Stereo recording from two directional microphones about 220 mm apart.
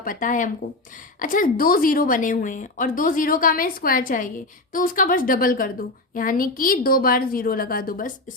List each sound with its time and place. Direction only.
0.0 s speech: 40° left (ahead or behind)